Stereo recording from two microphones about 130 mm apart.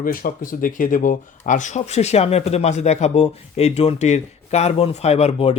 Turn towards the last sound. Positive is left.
turn(degrees=50)  # may be behind; listen again after turning